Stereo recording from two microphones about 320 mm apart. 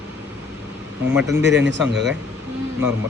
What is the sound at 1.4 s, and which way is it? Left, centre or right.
Speech, right.